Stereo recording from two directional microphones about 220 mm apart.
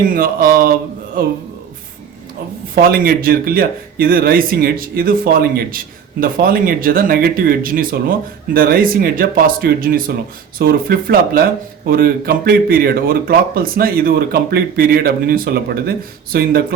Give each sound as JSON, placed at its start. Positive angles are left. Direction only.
{"t": 0.1, "sound": "speech", "side_deg": -40}
{"t": 2.9, "sound": "speech", "side_deg": -40}